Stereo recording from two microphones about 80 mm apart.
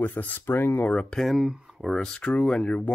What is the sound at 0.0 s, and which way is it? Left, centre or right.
Speech, left.